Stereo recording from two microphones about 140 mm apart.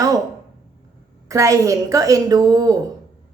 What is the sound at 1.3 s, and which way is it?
A woman's voice, 25° right (ahead or behind).